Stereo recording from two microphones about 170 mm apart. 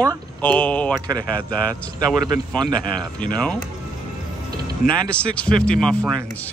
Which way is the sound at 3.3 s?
5° left (ahead or behind).